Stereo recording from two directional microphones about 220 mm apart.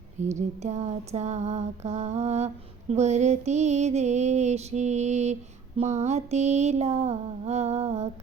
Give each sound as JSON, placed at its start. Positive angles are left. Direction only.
{"t": 0.2, "sound": "music", "side_deg": -30}